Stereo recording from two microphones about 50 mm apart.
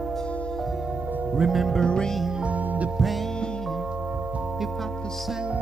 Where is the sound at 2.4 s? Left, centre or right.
Right.